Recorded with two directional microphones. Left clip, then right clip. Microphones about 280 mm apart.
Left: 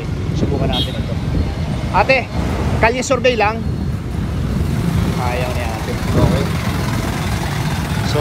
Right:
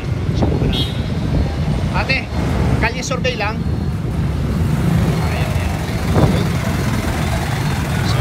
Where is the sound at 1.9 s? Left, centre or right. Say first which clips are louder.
Left 7 dB; centre.